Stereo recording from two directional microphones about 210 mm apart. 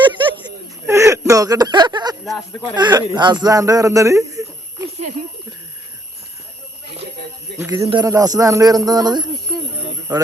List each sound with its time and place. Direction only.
0.0 s a sound: 20° right (ahead or behind)
2.7 s speech: 20° right (ahead or behind)
7.8 s speech: 25° right (ahead or behind)